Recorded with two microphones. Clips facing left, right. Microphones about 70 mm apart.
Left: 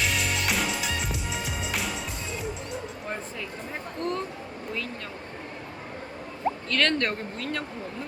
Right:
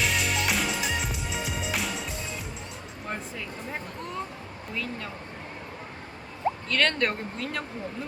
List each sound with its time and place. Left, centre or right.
0.0 s music: centre
3.7 s a sound: centre
6.7 s speech: centre